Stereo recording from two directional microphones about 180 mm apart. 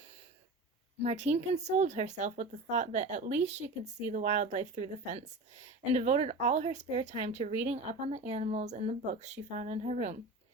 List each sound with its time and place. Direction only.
1.0 s speech: 40° right (ahead or behind)